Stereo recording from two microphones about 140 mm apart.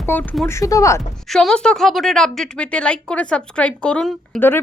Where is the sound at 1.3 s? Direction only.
5° left (ahead or behind).